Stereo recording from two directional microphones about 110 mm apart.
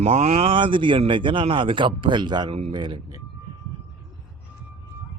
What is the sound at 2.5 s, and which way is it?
Speech, 65° right (ahead or behind).